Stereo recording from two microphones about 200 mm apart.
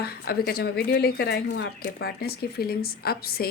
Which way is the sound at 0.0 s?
50° left (ahead or behind).